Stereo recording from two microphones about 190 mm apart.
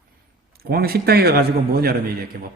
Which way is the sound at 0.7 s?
55° right (ahead or behind).